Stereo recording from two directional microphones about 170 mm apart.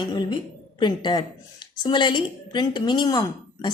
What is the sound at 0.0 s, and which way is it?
A woman's voice, 25° left (ahead or behind).